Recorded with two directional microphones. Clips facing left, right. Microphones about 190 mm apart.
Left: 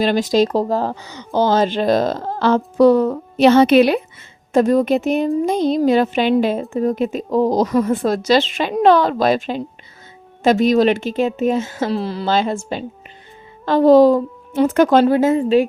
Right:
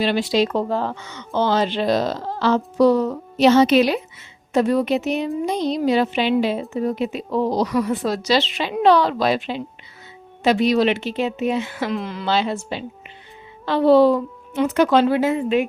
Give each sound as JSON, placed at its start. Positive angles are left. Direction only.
{"t": 0.0, "sound": "a woman's voice", "side_deg": 45}
{"t": 4.5, "sound": "a woman's voice", "side_deg": 45}
{"t": 12.3, "sound": "a woman's voice", "side_deg": 45}
{"t": 15.3, "sound": "a woman's voice", "side_deg": 30}